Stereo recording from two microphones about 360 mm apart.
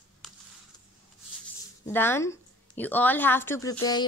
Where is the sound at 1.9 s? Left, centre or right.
Centre.